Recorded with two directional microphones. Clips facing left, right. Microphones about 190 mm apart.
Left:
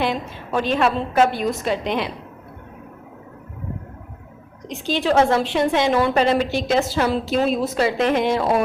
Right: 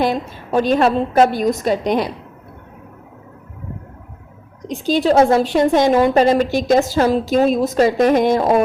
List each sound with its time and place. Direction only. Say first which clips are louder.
0.0 s a woman's voice: right 4 dB; 40° right (ahead or behind)
4.7 s a woman's voice: right 5 dB; 40° right (ahead or behind)